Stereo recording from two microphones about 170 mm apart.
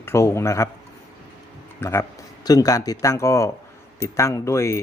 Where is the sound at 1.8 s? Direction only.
15° left (ahead or behind).